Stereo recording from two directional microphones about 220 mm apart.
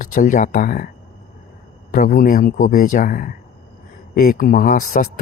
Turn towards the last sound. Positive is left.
turn(degrees=40)  # may be behind; listen again after turning